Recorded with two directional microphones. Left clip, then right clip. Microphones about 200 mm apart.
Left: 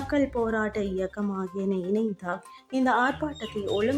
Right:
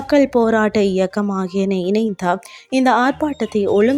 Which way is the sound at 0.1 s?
35° right (ahead or behind).